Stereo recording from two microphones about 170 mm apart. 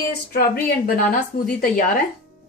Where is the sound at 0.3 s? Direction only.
60° left (ahead or behind).